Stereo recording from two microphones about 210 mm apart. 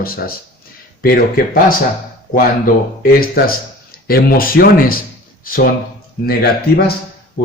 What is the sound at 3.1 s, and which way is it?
Speech, 45° left (ahead or behind).